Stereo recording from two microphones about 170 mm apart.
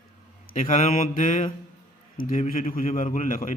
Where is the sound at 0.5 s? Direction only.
50° left (ahead or behind).